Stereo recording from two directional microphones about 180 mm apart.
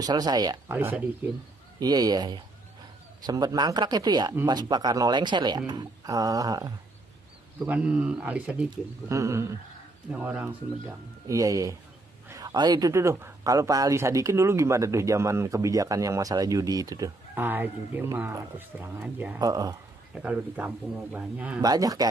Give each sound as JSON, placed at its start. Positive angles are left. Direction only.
{"t": 0.0, "sound": "speech", "side_deg": -20}
{"t": 0.7, "sound": "speech", "side_deg": -10}
{"t": 1.8, "sound": "speech", "side_deg": -20}
{"t": 7.6, "sound": "speech", "side_deg": -5}
{"t": 11.2, "sound": "speech", "side_deg": -20}
{"t": 19.4, "sound": "speech", "side_deg": -20}
{"t": 20.2, "sound": "speech", "side_deg": -5}
{"t": 21.5, "sound": "speech", "side_deg": -20}